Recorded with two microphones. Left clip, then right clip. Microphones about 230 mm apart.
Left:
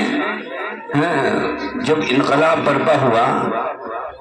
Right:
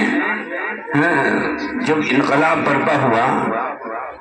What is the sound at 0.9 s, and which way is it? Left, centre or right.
A man's voice, left.